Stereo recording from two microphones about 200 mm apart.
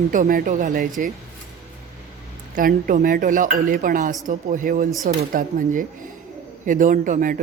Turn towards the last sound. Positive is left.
turn(degrees=-40)  # may be behind; listen again after turning